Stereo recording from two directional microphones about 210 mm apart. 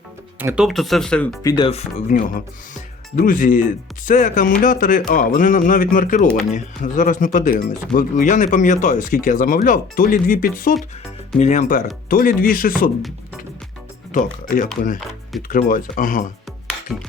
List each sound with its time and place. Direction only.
0.3 s speech: 5° right (ahead or behind)
1.5 s speech: 25° left (ahead or behind)
2.0 s speech: 40° left (ahead or behind)
14.1 s speech: 40° left (ahead or behind)
16.9 s speech: centre (ahead or behind)